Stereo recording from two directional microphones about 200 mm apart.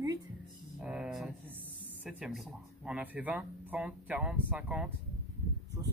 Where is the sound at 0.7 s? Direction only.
5° right (ahead or behind).